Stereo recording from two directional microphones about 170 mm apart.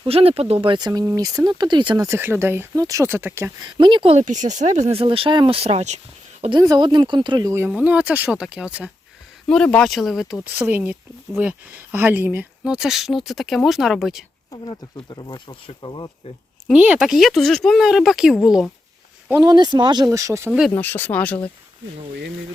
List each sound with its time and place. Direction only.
0.0 s speech: 35° right (ahead or behind)
2.0 s speech: 15° right (ahead or behind)
3.8 s speech: 30° right (ahead or behind)
6.6 s speech: 25° right (ahead or behind)
7.7 s speech: 10° right (ahead or behind)
9.5 s speech: 5° left (ahead or behind)
14.5 s speech: 30° left (ahead or behind)
16.6 s speech: 5° right (ahead or behind)
19.3 s speech: 20° right (ahead or behind)
20.5 s speech: centre (ahead or behind)
20.7 s speech: 10° left (ahead or behind)